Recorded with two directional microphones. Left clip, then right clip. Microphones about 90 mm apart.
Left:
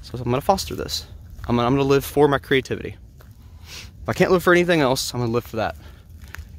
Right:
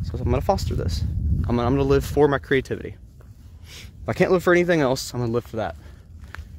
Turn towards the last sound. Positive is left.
turn(degrees=30)  # may be behind; listen again after turning